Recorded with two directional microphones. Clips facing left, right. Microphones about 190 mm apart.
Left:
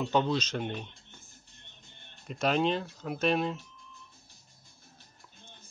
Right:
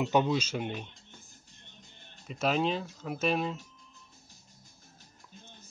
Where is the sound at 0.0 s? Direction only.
10° right (ahead or behind).